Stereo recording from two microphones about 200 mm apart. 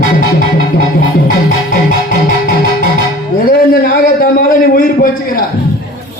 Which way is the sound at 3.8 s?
45° left (ahead or behind).